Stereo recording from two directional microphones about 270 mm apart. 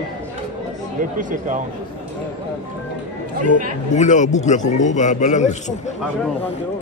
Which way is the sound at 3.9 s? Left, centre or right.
Left.